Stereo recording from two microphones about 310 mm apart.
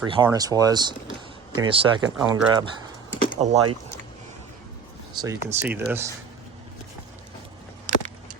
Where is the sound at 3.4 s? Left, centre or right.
Centre.